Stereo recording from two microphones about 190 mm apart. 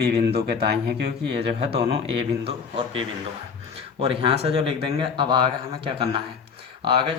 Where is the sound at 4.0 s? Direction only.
30° right (ahead or behind).